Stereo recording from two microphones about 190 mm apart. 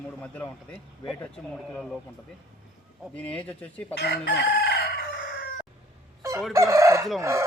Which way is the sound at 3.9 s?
65° left (ahead or behind).